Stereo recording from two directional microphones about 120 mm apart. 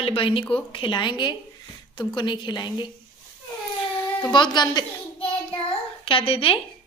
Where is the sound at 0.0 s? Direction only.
50° left (ahead or behind).